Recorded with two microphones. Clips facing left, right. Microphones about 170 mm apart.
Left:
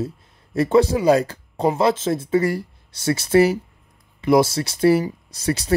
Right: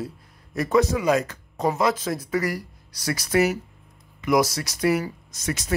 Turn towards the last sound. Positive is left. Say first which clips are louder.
# left 6 dB
turn(degrees=35)  # may be behind; listen again after turning